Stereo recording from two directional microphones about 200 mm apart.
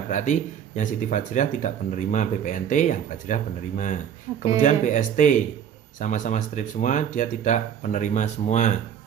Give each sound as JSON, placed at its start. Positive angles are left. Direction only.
{"t": 0.1, "sound": "speech", "side_deg": 40}